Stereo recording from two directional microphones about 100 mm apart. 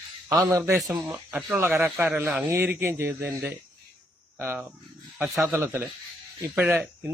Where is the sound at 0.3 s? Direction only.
30° right (ahead or behind).